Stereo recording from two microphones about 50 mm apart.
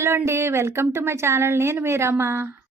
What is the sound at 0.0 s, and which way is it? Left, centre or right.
A woman's voice, right.